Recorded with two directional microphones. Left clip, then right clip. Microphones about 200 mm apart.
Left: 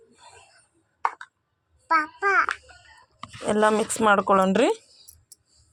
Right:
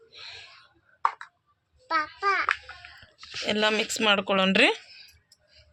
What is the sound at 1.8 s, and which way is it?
Babbling, 35° left (ahead or behind).